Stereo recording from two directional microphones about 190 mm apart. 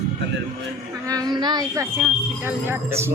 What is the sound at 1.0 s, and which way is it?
A woman's voice, 20° right (ahead or behind).